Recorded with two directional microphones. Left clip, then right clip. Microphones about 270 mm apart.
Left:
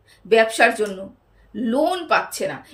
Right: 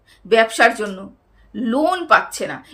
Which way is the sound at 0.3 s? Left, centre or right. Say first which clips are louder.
Right 2 dB; centre.